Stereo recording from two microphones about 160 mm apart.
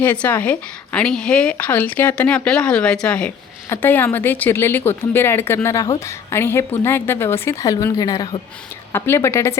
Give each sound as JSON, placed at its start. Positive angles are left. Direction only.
{"t": 0.0, "sound": "speech", "side_deg": 10}